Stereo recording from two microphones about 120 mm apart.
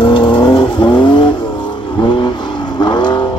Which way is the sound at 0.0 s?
40° left (ahead or behind).